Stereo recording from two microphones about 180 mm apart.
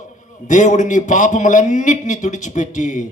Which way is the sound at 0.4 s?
45° left (ahead or behind).